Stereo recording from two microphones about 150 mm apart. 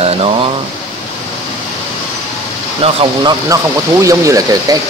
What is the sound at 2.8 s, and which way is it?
Speech, 40° right (ahead or behind).